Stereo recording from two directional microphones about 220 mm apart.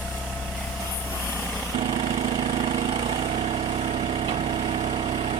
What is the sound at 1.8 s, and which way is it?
Engine, 25° right (ahead or behind).